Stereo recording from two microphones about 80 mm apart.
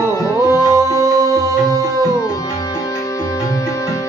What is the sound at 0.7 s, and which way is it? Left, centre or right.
Music, right.